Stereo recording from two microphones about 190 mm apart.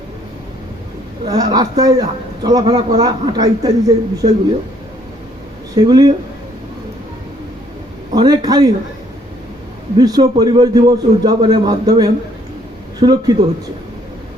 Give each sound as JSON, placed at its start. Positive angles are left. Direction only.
{"t": 1.2, "sound": "a man's voice", "side_deg": -20}
{"t": 5.7, "sound": "a man's voice", "side_deg": -20}
{"t": 8.1, "sound": "a man's voice", "side_deg": -20}
{"t": 10.0, "sound": "a man's voice", "side_deg": -20}